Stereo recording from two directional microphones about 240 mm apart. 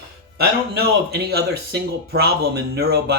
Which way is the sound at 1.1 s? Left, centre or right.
Right.